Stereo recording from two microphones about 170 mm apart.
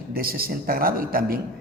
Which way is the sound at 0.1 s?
60° right (ahead or behind).